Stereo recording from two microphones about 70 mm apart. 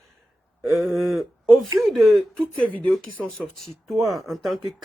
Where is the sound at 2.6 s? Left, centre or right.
Centre.